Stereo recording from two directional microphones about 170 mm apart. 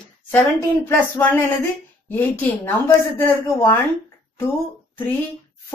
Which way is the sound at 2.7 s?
10° left (ahead or behind).